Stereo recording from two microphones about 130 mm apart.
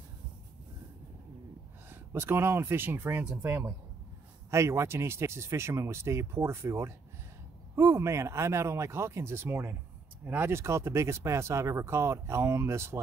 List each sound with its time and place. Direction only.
1.9 s speech: 20° right (ahead or behind)